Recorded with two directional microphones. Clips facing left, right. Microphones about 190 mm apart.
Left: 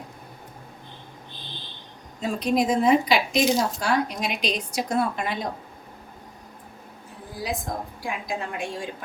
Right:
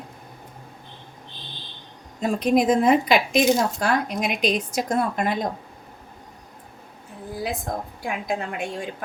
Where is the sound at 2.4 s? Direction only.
50° right (ahead or behind).